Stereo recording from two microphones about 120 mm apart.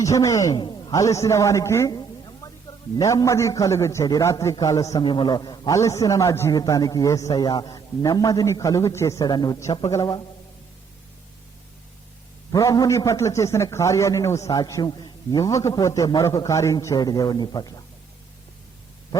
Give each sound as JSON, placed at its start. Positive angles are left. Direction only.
{"t": 0.0, "sound": "a man's voice", "side_deg": 25}
{"t": 0.5, "sound": "a man's voice", "side_deg": 40}
{"t": 5.0, "sound": "a man's voice", "side_deg": 40}
{"t": 12.5, "sound": "a man's voice", "side_deg": 30}